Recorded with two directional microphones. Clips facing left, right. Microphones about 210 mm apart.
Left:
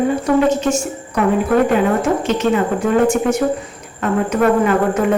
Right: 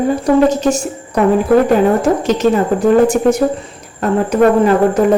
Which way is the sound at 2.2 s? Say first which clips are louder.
Right 3 dB; 40° right (ahead or behind).